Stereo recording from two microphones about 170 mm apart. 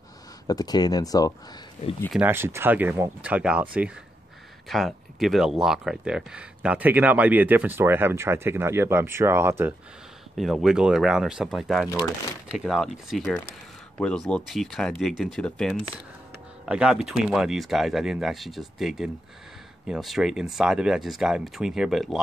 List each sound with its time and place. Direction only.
0.5 s speech: 20° left (ahead or behind)
2.1 s speech: 15° right (ahead or behind)
4.6 s speech: centre (ahead or behind)
10.3 s speech: centre (ahead or behind)
16.6 s speech: 5° right (ahead or behind)